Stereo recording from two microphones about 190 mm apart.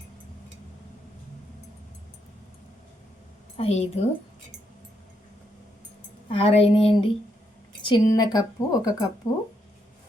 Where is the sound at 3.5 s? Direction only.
30° left (ahead or behind).